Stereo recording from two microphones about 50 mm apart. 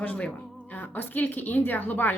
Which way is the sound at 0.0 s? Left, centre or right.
Left.